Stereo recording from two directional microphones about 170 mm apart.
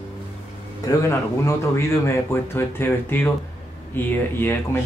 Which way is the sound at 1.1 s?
15° left (ahead or behind).